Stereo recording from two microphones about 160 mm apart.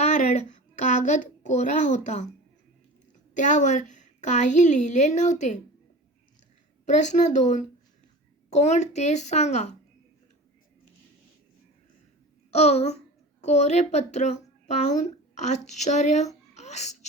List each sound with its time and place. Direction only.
0.0 s a woman's voice: 45° left (ahead or behind)
3.3 s a woman's voice: 50° left (ahead or behind)
6.8 s a woman's voice: 50° left (ahead or behind)
12.5 s a woman's voice: 40° left (ahead or behind)